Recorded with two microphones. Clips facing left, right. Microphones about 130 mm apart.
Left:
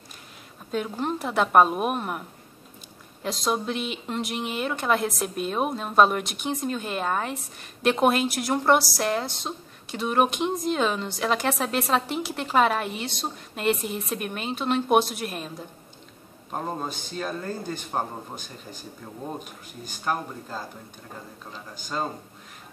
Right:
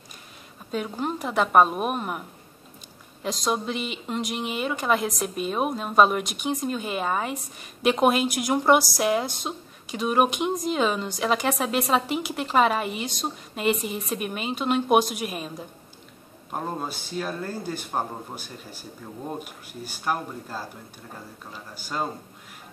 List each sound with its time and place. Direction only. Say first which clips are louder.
0.7 s a woman's voice: left 1 dB; centre (ahead or behind)
16.5 s speech: even; 5° right (ahead or behind)